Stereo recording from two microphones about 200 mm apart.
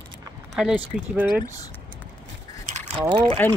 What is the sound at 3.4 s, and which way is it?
Speech, 10° left (ahead or behind).